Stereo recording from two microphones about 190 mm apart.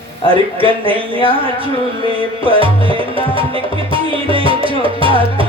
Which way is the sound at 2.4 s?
30° right (ahead or behind).